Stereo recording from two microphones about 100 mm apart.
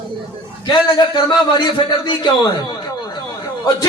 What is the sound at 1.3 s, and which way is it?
A man's voice, 50° left (ahead or behind).